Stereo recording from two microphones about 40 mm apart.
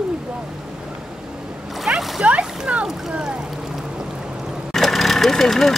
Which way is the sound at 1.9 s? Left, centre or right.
Right.